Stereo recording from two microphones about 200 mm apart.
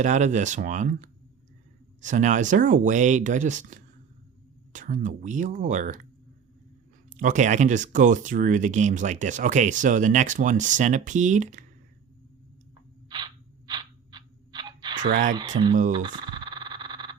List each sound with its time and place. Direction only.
0.0 s speech: 35° right (ahead or behind)
7.1 s speech: 40° right (ahead or behind)
13.1 s a sound: 20° right (ahead or behind)
15.1 s speech: 45° right (ahead or behind)
15.4 s speech: 20° right (ahead or behind)
16.0 s a sound: 25° right (ahead or behind)